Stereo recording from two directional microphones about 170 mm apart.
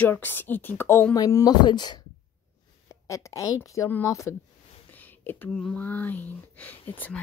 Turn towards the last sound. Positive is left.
turn(degrees=10)  # may be behind; listen again after turning